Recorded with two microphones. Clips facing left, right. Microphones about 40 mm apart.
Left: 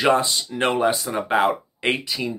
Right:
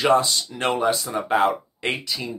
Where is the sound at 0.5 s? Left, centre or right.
Centre.